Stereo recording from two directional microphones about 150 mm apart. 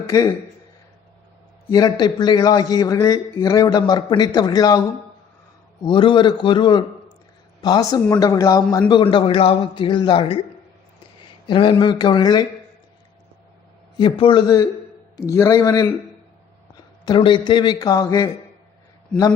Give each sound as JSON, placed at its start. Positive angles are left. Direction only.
{"t": 0.0, "sound": "a man's voice", "side_deg": 20}
{"t": 1.7, "sound": "a man's voice", "side_deg": 25}
{"t": 5.8, "sound": "a man's voice", "side_deg": 35}
{"t": 8.9, "sound": "a man's voice", "side_deg": 35}
{"t": 11.4, "sound": "a man's voice", "side_deg": 35}
{"t": 13.9, "sound": "a man's voice", "side_deg": 35}
{"t": 17.1, "sound": "a man's voice", "side_deg": 35}